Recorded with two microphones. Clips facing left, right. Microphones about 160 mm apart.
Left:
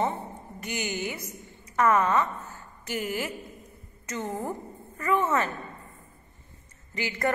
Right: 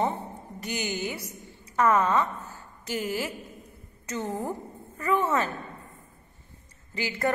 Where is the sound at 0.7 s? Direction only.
10° right (ahead or behind).